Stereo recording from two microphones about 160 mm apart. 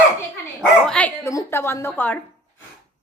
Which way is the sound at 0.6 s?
5° left (ahead or behind).